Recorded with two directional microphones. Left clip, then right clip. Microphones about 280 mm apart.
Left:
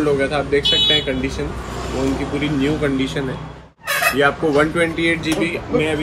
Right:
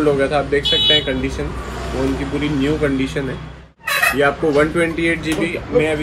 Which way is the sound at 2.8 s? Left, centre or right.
Centre.